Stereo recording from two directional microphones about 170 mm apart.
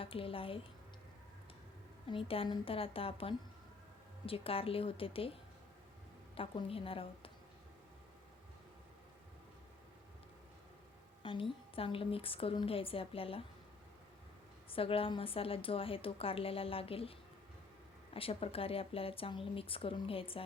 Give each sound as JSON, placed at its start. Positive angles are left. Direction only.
{"t": 0.0, "sound": "a woman's voice", "side_deg": 35}
{"t": 2.0, "sound": "a woman's voice", "side_deg": 30}
{"t": 11.2, "sound": "a woman's voice", "side_deg": 30}
{"t": 14.7, "sound": "a woman's voice", "side_deg": 35}